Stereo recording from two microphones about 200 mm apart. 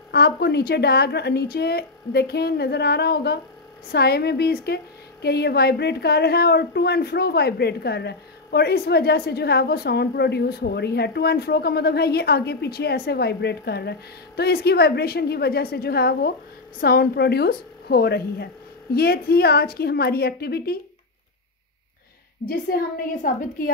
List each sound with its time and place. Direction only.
0.1 s a woman's voice: 55° left (ahead or behind)
22.4 s a woman's voice: 65° left (ahead or behind)
23.2 s a woman's voice: 40° left (ahead or behind)